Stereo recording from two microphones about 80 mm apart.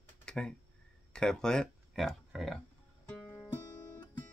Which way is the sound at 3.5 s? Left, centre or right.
Left.